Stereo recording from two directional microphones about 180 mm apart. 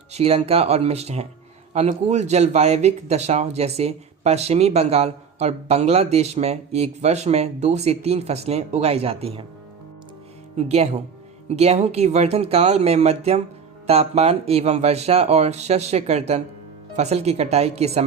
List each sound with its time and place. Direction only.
0.1 s speech: 35° right (ahead or behind)
11.4 s speech: 35° right (ahead or behind)